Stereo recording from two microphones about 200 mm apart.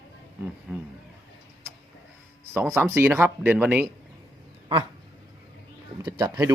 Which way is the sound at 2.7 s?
15° right (ahead or behind).